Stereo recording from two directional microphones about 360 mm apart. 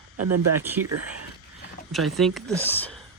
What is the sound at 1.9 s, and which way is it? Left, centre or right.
Speech, centre.